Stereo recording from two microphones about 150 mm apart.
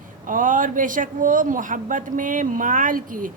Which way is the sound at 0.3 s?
65° right (ahead or behind).